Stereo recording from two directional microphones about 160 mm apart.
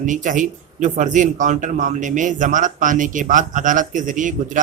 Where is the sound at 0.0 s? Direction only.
55° right (ahead or behind).